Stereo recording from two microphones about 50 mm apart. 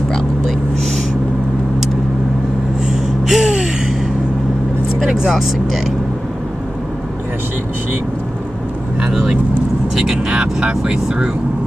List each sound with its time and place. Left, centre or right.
2.9 s gasp: centre
5.3 s speech: centre
9.1 s speech: centre